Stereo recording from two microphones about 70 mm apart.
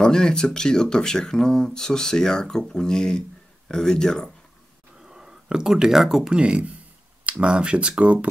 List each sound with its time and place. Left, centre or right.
0.0 s speech: centre
4.9 s speech: centre